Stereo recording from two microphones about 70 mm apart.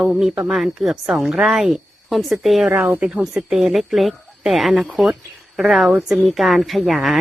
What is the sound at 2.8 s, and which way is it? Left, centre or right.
Speech, right.